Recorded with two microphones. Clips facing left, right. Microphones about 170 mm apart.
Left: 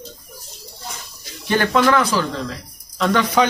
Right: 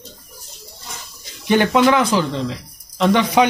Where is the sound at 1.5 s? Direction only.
15° right (ahead or behind).